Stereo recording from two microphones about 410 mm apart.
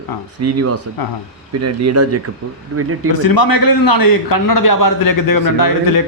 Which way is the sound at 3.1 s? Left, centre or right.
Left.